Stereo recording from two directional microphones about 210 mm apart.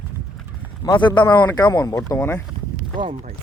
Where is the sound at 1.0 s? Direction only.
20° left (ahead or behind).